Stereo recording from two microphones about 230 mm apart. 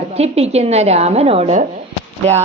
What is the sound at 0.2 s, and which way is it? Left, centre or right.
A woman's voice, right.